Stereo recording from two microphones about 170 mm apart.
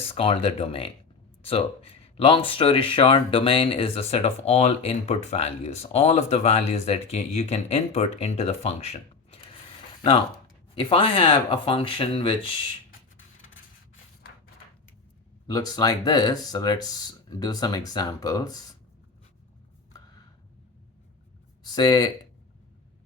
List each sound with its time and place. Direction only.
0.1 s speech: 35° left (ahead or behind)
10.8 s speech: 30° left (ahead or behind)
15.4 s speech: 25° left (ahead or behind)
21.7 s speech: 25° left (ahead or behind)